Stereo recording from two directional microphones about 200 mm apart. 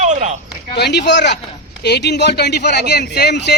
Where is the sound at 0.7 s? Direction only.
55° left (ahead or behind).